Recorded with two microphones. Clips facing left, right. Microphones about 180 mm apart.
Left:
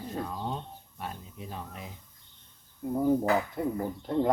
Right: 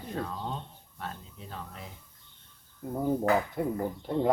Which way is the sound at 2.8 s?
Centre (ahead or behind).